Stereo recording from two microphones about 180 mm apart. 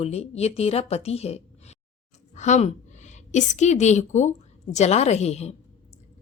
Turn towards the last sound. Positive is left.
turn(degrees=35)  # may be behind; listen again after turning